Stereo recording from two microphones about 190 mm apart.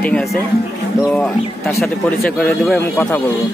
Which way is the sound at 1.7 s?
5° left (ahead or behind).